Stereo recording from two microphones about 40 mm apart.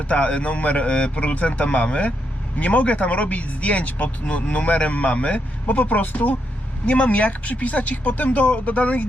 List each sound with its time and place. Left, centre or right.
0.1 s speech: left
6.8 s speech: left